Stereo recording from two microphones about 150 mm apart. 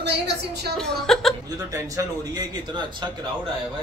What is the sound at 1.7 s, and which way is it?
Speech, 20° right (ahead or behind).